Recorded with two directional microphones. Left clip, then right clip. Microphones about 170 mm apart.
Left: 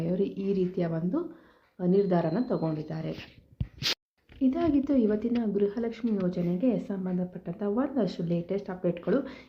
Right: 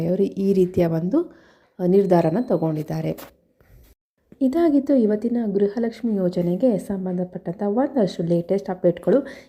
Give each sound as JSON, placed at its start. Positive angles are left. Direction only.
{"t": 0.0, "sound": "speech", "side_deg": -40}
{"t": 4.4, "sound": "a woman's voice", "side_deg": -40}